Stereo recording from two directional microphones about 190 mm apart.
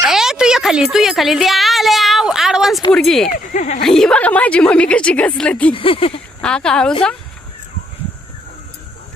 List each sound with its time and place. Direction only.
0.0 s a sound: centre (ahead or behind)
2.9 s a woman's voice: centre (ahead or behind)
3.3 s speech: 40° left (ahead or behind)
3.8 s a woman's voice: centre (ahead or behind)
5.7 s speech: 30° left (ahead or behind)
6.4 s a woman's voice: 5° left (ahead or behind)